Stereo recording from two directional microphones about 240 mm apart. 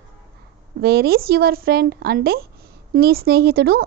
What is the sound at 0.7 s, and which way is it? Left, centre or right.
A woman's voice, right.